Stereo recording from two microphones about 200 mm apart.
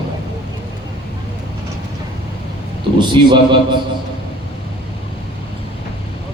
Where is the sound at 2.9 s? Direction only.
25° right (ahead or behind).